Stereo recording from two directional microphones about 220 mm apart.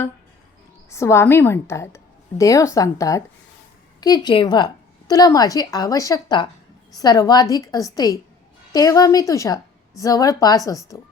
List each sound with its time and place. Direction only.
0.9 s a woman's voice: 10° left (ahead or behind)